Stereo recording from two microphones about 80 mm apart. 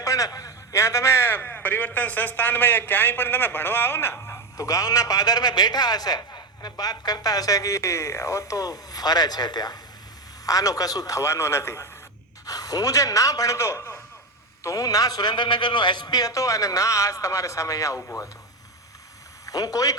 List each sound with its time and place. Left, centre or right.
0.0 s a man's voice: left
10.4 s a man's voice: left
12.5 s a man's voice: left
16.2 s a man's voice: left
19.5 s a man's voice: left